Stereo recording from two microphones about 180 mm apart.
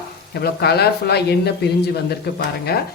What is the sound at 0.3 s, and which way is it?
Speech, 60° left (ahead or behind).